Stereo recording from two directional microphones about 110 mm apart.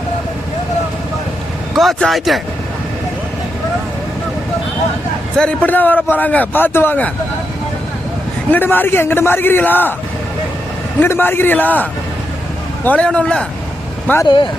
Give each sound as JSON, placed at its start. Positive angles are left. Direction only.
{"t": 1.7, "sound": "speech", "side_deg": 0}
{"t": 5.4, "sound": "a man's voice", "side_deg": 15}
{"t": 8.4, "sound": "a man's voice", "side_deg": 15}
{"t": 11.0, "sound": "a man's voice", "side_deg": 20}
{"t": 14.3, "sound": "speech", "side_deg": 45}